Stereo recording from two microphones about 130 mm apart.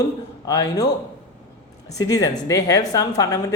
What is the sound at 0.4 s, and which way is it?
Speech, 30° left (ahead or behind).